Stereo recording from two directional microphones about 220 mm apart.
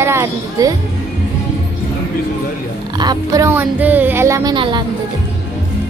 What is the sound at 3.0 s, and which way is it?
Speech, 20° right (ahead or behind).